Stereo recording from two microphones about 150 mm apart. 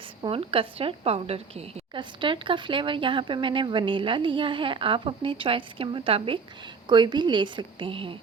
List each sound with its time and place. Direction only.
0.2 s a woman's voice: 35° right (ahead or behind)